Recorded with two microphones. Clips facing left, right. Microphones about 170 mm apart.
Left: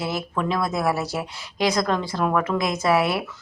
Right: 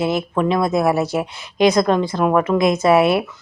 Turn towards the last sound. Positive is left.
turn(degrees=-25)  # may be behind; listen again after turning